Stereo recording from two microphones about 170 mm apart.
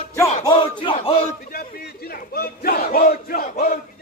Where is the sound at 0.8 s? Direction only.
30° left (ahead or behind).